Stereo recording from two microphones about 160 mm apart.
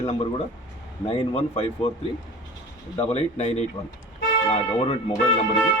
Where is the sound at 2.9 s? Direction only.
40° left (ahead or behind).